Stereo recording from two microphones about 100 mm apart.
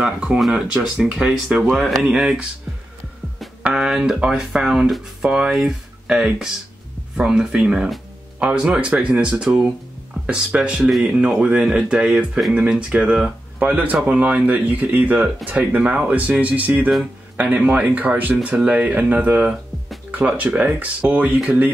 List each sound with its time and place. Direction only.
0.0 s speech: 10° right (ahead or behind)
3.6 s speech: 5° right (ahead or behind)